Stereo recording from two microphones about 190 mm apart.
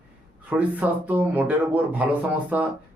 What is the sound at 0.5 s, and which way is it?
A man's voice, 10° right (ahead or behind).